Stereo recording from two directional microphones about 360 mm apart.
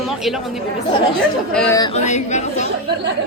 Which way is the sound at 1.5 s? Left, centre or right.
Centre.